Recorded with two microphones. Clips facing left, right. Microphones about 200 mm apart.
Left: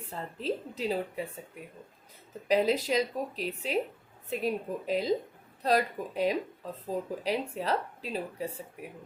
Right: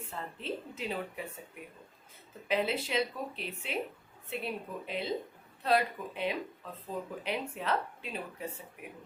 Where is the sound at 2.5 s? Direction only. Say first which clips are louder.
Left 5 dB; 40° left (ahead or behind).